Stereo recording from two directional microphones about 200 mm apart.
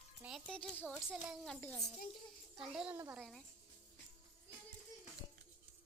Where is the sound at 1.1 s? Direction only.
5° right (ahead or behind).